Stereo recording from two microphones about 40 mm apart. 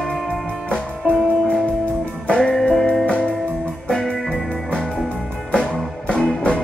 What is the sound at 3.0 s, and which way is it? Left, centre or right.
Music, left.